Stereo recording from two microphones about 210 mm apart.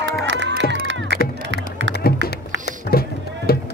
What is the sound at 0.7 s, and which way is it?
Music, 60° right (ahead or behind).